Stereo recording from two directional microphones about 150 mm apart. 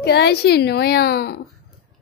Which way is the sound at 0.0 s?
90° left.